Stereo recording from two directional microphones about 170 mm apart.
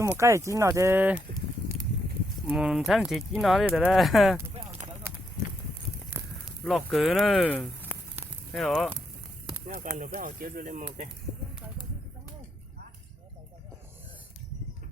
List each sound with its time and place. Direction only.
0.2 s speech: 15° right (ahead or behind)
2.5 s speech: 5° right (ahead or behind)
6.2 s a sound: 15° right (ahead or behind)
6.7 s speech: centre (ahead or behind)
8.2 s a sound: centre (ahead or behind)
9.6 s speech: 50° right (ahead or behind)